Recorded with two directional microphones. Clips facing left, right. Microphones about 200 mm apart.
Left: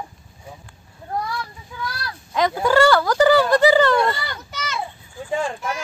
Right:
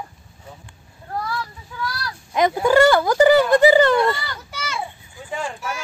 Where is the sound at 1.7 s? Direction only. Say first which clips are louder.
Right 2 dB; 20° left (ahead or behind).